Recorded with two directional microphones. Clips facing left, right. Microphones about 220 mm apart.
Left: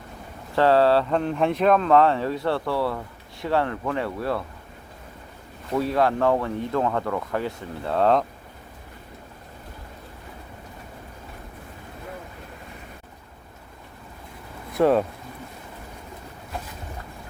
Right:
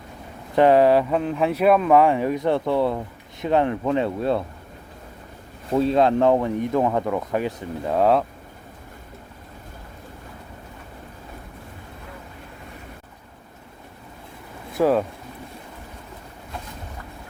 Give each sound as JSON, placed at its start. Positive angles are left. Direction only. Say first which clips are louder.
{"t": 0.5, "sound": "speech", "louder": "right 3 dB", "side_deg": -15}
{"t": 1.2, "sound": "speech", "louder": "right 1 dB", "side_deg": -5}
{"t": 5.7, "sound": "speech", "louder": "right 4 dB", "side_deg": -25}
{"t": 14.7, "sound": "speech", "louder": "even", "side_deg": 0}